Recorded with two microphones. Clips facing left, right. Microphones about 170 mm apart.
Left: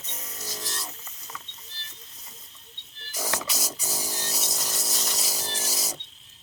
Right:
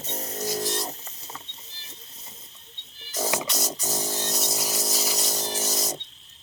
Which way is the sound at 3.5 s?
5° left (ahead or behind).